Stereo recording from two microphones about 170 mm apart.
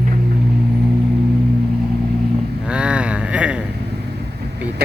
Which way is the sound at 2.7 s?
5° right (ahead or behind).